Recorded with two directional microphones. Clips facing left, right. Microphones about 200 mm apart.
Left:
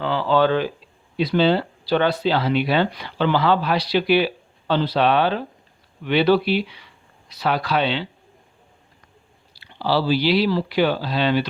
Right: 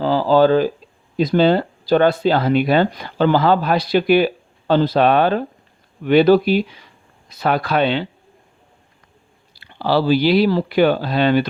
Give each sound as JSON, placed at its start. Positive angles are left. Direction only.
{"t": 0.0, "sound": "speech", "side_deg": -40}
{"t": 9.5, "sound": "speech", "side_deg": -50}